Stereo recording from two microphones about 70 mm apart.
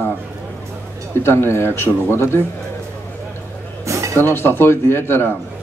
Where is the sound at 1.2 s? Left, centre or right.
Left.